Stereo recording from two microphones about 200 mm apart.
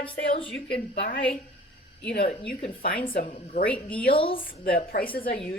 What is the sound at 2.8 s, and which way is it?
Speech, 45° left (ahead or behind).